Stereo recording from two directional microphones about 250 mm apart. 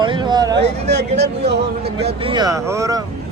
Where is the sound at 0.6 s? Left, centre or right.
Right.